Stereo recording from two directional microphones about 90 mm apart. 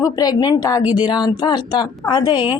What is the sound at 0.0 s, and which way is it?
A woman's voice, 45° left (ahead or behind).